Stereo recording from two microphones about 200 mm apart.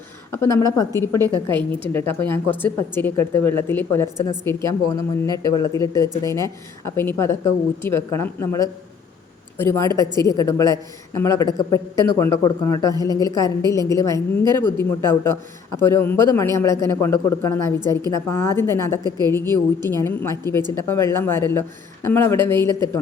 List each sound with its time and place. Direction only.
0.3 s a woman's voice: 15° left (ahead or behind)
0.9 s a woman's voice: 15° right (ahead or behind)
1.5 s speech: 10° left (ahead or behind)
17.7 s a woman's voice: 20° right (ahead or behind)
18.1 s speech: 15° left (ahead or behind)